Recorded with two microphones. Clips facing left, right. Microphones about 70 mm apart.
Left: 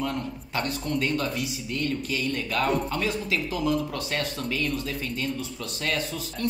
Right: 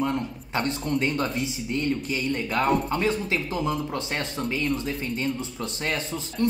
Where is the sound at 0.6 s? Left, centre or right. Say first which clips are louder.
Right 2 dB; right.